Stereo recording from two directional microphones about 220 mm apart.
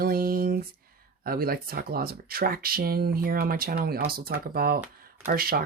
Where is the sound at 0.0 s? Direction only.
40° right (ahead or behind).